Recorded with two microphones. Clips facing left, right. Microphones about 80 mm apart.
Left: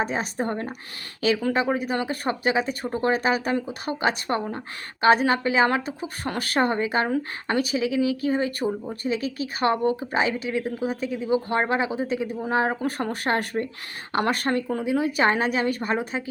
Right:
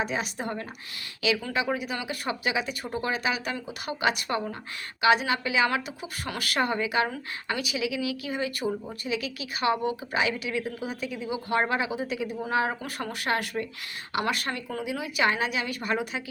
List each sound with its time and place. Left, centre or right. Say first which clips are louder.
0.0 s a woman's voice: left 4 dB; left